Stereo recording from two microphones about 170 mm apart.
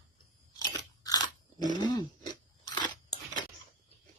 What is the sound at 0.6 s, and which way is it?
Crunch, 20° left (ahead or behind).